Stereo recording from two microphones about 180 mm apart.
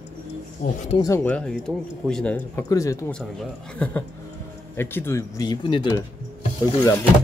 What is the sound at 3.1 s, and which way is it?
Speech, 5° left (ahead or behind).